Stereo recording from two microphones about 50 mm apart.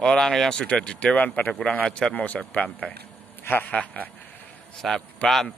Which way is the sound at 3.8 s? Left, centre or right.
Left.